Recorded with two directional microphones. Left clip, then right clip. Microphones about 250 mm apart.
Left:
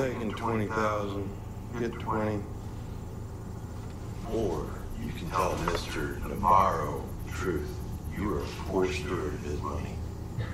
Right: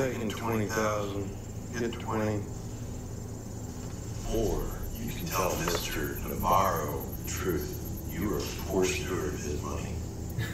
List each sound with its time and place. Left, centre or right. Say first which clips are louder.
0.0 s speech: left 1 dB; centre
4.4 s speech: even; centre